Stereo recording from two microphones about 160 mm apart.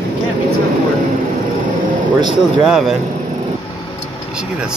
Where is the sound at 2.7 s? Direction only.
Centre (ahead or behind).